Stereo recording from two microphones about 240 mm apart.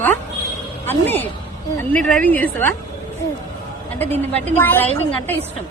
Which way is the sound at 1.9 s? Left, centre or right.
Centre.